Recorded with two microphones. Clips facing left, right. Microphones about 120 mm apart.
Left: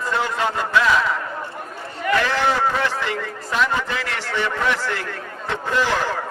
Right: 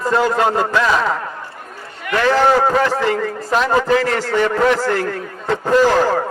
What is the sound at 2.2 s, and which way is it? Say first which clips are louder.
A man's voice: right 7 dB; 40° right (ahead or behind).